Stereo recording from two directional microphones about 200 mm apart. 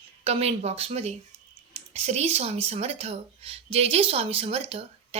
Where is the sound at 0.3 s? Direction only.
30° right (ahead or behind).